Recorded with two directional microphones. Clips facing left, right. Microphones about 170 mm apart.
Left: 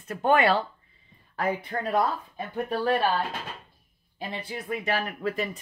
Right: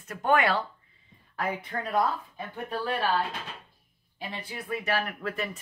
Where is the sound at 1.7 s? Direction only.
30° left (ahead or behind).